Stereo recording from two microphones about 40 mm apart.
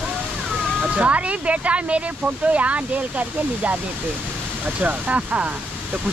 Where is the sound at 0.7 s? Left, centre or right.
Right.